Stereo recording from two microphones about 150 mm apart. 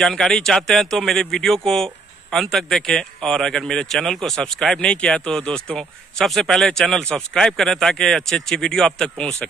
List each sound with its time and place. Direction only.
0.0 s speech: 5° left (ahead or behind)